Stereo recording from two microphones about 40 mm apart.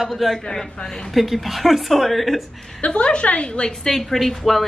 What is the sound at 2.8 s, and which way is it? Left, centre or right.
Speech, left.